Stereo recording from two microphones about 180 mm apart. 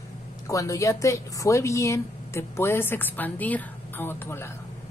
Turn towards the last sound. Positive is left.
turn(degrees=15)  # may be behind; listen again after turning